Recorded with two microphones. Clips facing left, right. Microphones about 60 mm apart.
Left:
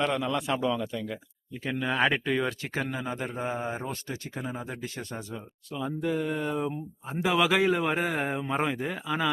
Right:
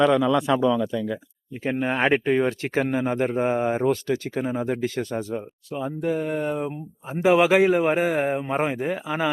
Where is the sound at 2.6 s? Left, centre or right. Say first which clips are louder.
Right 9 dB; right.